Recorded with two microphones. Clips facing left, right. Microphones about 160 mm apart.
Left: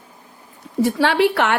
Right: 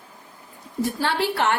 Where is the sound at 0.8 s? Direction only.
75° left (ahead or behind).